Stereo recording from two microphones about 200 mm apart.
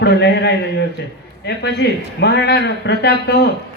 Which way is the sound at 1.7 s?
55° left (ahead or behind).